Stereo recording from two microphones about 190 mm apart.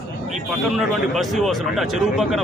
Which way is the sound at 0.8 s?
Centre (ahead or behind).